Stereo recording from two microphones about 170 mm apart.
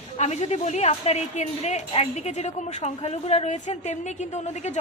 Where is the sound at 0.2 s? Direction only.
40° left (ahead or behind).